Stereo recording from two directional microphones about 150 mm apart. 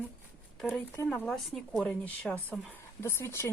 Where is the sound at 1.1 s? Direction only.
5° left (ahead or behind).